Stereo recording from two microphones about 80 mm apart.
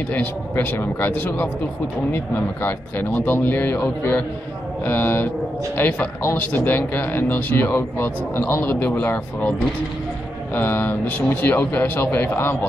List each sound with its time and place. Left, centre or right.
0.1 s speech: left
10.5 s speech: left